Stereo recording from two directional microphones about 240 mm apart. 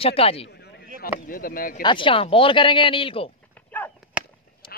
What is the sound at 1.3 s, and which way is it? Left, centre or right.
Speech, left.